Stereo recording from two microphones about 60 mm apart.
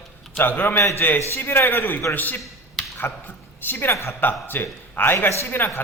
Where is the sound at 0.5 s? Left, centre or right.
Left.